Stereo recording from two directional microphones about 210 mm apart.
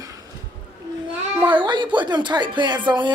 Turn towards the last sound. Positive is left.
turn(degrees=-25)  # may be behind; listen again after turning